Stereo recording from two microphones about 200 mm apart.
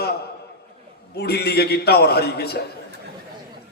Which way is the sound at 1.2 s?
55° left (ahead or behind).